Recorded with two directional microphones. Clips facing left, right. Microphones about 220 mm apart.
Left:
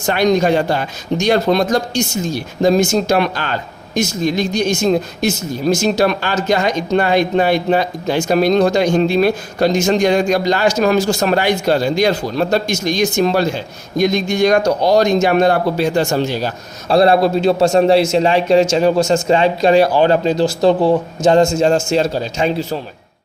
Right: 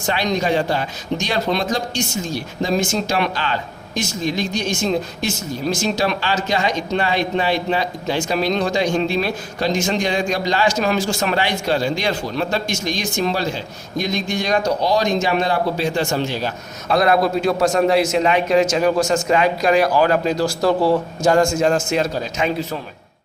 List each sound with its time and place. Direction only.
0.0 s a man's voice: 45° left (ahead or behind)